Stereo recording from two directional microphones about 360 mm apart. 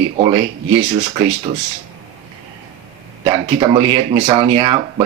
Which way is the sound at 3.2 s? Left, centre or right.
Centre.